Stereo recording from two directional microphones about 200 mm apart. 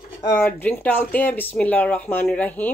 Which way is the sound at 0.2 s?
10° left (ahead or behind).